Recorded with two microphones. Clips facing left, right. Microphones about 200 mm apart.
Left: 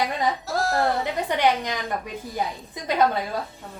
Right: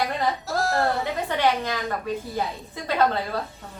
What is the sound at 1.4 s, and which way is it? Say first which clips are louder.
Speech: even; 15° left (ahead or behind).